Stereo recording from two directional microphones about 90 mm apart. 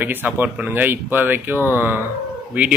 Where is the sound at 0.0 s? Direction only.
20° right (ahead or behind).